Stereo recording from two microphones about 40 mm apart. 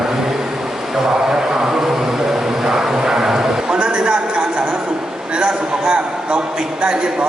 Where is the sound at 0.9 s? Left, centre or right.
Centre.